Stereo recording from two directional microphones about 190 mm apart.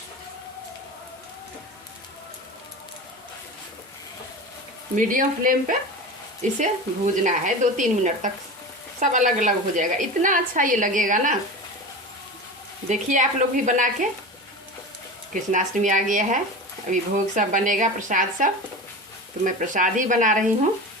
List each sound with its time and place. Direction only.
4.9 s a woman's voice: 45° right (ahead or behind)
12.9 s speech: 40° right (ahead or behind)
15.3 s a woman's voice: 40° right (ahead or behind)